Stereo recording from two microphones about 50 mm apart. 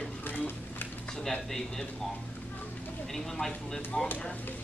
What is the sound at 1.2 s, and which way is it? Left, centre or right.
Speech, centre.